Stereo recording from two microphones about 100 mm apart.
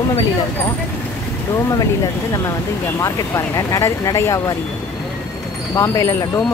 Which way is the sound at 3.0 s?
30° left (ahead or behind).